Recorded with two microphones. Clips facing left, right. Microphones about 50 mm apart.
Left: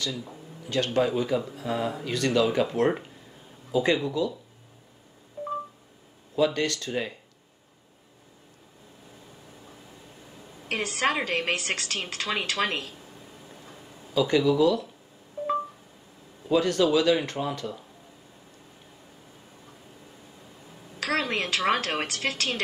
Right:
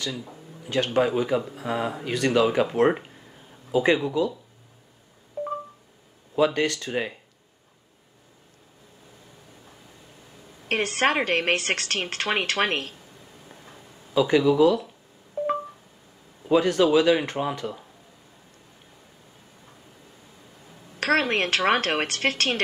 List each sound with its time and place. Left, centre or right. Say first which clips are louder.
0.7 s speech: right 2 dB; right
6.3 s speech: right 2 dB; right
10.7 s speech: right 4 dB; right
13.5 s a sound: even; right
16.4 s speech: right 3 dB; right
21.0 s speech: right 5 dB; right